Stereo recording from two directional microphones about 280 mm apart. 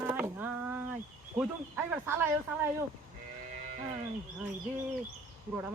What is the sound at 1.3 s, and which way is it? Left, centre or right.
Speech, centre.